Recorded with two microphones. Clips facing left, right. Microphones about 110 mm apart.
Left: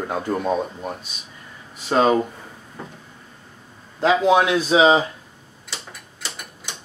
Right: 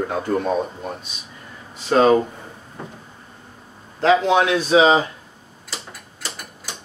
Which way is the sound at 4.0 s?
10° left (ahead or behind).